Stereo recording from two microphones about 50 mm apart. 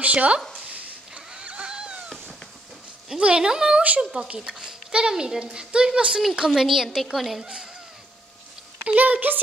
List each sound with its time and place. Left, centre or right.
0.0 s speech: right
0.7 s a sound: right
3.1 s a child's voice: centre
8.9 s a child's voice: right